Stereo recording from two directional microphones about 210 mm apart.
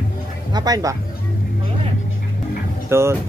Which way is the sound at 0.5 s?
15° right (ahead or behind).